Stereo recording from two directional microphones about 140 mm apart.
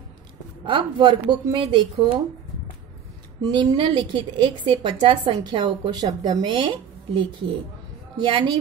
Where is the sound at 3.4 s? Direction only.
30° right (ahead or behind).